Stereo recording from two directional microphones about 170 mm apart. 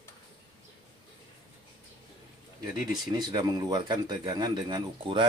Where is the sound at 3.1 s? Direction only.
25° right (ahead or behind).